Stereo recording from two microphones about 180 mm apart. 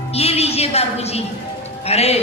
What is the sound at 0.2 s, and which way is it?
Music, 35° left (ahead or behind).